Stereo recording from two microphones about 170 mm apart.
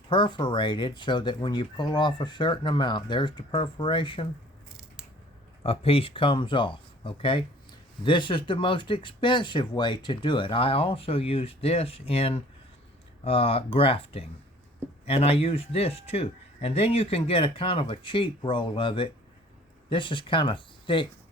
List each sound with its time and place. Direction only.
0.1 s speech: 25° left (ahead or behind)
5.6 s speech: 35° left (ahead or behind)